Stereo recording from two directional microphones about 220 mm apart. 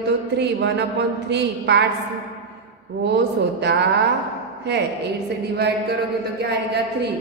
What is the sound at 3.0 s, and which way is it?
Speech, 50° right (ahead or behind).